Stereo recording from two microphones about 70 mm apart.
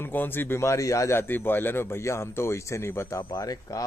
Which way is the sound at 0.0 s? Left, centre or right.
Left.